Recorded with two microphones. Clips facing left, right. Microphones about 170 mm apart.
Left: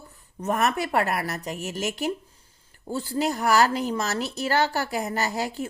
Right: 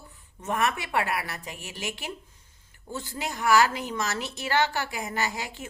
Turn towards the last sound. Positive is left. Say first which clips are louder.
# left 5 dB
turn(degrees=35)  # may be behind; listen again after turning